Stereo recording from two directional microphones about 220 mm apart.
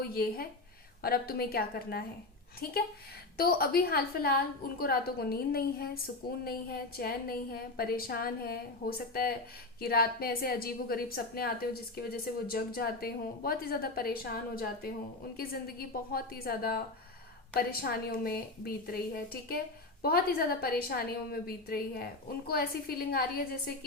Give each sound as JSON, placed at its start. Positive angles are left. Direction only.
{"t": 0.1, "sound": "a woman's voice", "side_deg": 45}